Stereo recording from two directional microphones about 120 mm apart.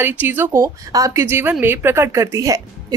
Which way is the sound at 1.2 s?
15° right (ahead or behind).